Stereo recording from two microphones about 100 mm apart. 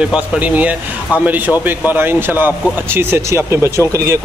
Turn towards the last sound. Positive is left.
turn(degrees=-30)  # may be behind; listen again after turning